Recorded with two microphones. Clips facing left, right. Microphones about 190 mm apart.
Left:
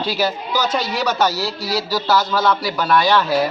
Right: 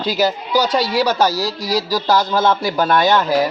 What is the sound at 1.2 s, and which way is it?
A man's voice, 15° right (ahead or behind).